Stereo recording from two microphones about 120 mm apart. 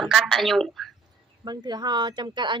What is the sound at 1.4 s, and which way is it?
Speech, 35° right (ahead or behind).